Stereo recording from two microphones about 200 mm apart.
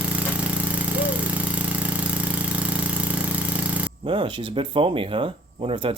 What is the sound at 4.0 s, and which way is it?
Speech, 25° right (ahead or behind).